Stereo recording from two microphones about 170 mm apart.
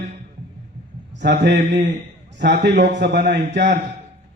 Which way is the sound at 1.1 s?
90° right.